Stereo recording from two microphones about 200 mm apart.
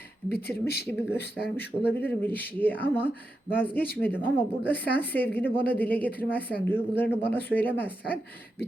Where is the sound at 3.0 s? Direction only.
50° left (ahead or behind).